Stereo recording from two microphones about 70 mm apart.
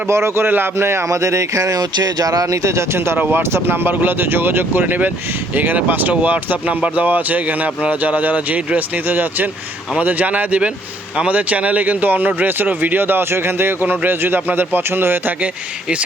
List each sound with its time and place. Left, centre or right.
0.1 s speech: right